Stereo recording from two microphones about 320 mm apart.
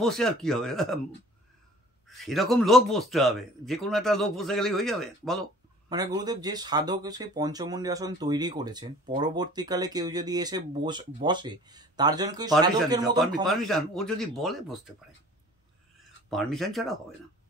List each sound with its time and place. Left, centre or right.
0.0 s a man's voice: centre
2.0 s a man's voice: centre
5.9 s speech: centre
13.5 s a man's voice: centre
16.3 s a man's voice: centre